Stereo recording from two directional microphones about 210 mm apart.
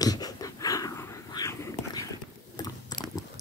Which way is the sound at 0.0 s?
20° left (ahead or behind).